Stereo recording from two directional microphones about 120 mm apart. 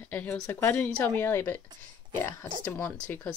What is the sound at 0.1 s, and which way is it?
Speech, 15° left (ahead or behind).